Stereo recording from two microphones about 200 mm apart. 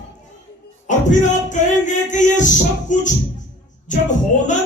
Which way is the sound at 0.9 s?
40° left (ahead or behind).